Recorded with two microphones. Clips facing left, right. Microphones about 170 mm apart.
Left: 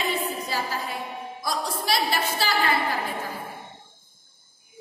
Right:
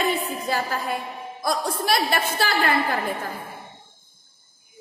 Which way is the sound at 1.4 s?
50° right (ahead or behind).